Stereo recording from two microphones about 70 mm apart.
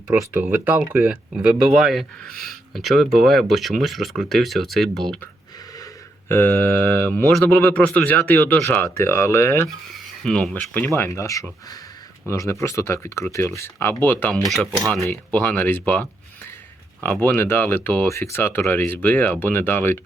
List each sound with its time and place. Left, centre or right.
0.5 s speech: right
1.0 s speech: centre
6.2 s a sound: left
6.6 s speech: left
8.7 s speech: left
9.6 s speech: centre
10.5 s speech: left
10.9 s speech: left
14.8 s speech: centre
15.1 s speech: left
15.9 s a sound: left
17.0 s speech: left